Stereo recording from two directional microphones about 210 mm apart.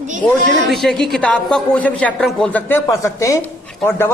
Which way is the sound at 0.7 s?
Centre (ahead or behind).